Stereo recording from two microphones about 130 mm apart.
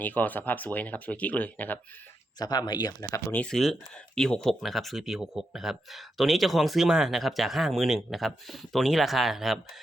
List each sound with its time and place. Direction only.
0.0 s speech: 15° left (ahead or behind)
2.4 s speech: 30° left (ahead or behind)
3.3 s speech: 5° left (ahead or behind)